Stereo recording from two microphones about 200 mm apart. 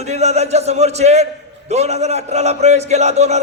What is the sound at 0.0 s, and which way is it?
A man's voice, 35° right (ahead or behind).